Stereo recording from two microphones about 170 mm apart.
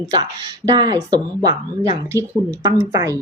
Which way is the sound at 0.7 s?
25° right (ahead or behind).